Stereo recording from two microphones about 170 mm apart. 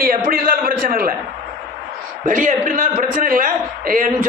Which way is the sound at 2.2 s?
50° right (ahead or behind).